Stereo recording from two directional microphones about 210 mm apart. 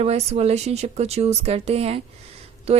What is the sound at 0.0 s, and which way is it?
A woman's voice, 30° right (ahead or behind).